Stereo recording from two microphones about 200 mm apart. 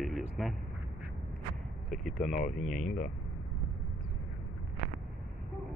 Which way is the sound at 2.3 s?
40° left (ahead or behind).